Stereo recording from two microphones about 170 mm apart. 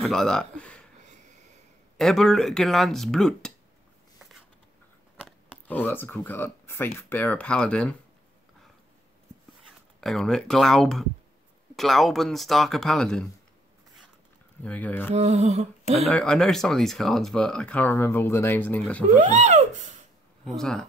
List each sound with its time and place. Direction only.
0.0 s speech: 5° left (ahead or behind)
2.0 s speech: centre (ahead or behind)
5.7 s speech: 10° left (ahead or behind)
9.9 s speech: centre (ahead or behind)
14.6 s speech: 10° left (ahead or behind)
15.1 s a sound: 40° right (ahead or behind)
16.0 s speech: 5° left (ahead or behind)
19.1 s a sound: 40° right (ahead or behind)
20.4 s speech: 5° left (ahead or behind)